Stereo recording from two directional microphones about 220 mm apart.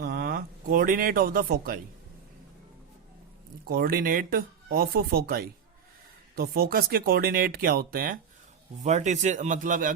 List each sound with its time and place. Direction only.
0.0 s speech: 45° right (ahead or behind)
3.7 s speech: 40° right (ahead or behind)